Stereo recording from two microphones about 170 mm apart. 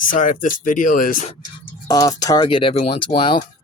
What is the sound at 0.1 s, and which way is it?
Speech, 50° left (ahead or behind).